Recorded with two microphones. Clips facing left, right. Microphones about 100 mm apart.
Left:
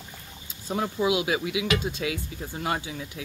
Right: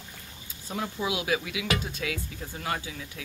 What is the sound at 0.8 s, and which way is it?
Speech, 20° left (ahead or behind).